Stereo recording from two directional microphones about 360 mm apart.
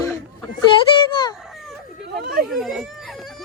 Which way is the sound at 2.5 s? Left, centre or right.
Centre.